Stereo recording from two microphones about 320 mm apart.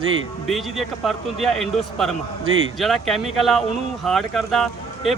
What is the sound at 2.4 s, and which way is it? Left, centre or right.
Speech, right.